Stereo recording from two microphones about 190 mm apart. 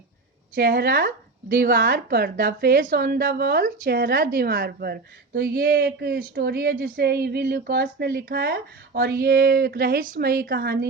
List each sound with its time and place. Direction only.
0.5 s speech: 55° right (ahead or behind)